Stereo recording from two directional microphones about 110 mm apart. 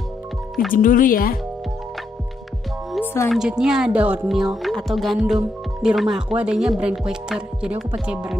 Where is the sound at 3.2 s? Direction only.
5° right (ahead or behind).